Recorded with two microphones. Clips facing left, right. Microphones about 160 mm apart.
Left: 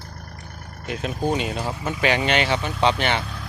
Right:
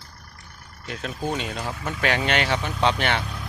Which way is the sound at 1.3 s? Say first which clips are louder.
Left 4 dB; 10° left (ahead or behind).